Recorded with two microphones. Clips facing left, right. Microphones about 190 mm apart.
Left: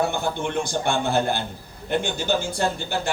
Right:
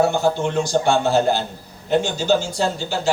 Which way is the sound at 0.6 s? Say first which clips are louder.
Right 7 dB; 55° left (ahead or behind).